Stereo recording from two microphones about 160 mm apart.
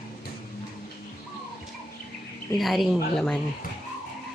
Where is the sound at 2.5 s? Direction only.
Centre (ahead or behind).